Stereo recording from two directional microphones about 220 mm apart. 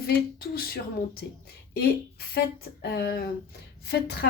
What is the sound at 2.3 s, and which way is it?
A woman's voice, 45° left (ahead or behind).